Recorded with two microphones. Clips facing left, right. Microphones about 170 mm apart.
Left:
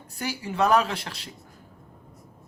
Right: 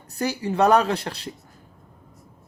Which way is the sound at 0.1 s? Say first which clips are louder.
Right 6 dB; 35° right (ahead or behind).